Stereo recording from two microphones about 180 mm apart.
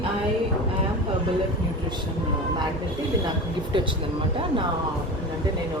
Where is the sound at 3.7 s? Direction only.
25° right (ahead or behind).